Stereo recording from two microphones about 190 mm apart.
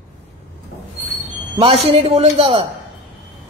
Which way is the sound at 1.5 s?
30° right (ahead or behind).